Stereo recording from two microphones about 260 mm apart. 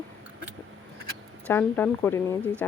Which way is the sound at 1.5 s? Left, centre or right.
Centre.